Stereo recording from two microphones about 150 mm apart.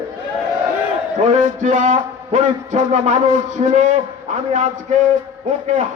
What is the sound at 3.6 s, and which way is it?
Speech, 35° right (ahead or behind).